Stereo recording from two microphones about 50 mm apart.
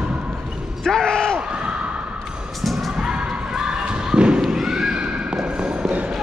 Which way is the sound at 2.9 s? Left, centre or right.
Centre.